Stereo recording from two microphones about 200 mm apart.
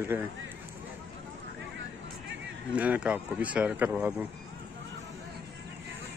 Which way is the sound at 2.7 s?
5° right (ahead or behind).